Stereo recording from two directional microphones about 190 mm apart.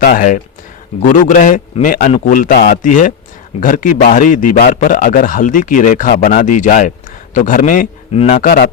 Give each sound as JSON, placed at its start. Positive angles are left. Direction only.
{"t": 0.0, "sound": "a man's voice", "side_deg": 50}
{"t": 8.4, "sound": "a man's voice", "side_deg": 50}